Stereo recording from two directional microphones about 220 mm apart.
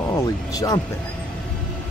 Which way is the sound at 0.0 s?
15° left (ahead or behind).